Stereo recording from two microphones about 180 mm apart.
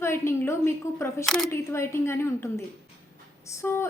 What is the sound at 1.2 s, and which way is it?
Speech, centre (ahead or behind).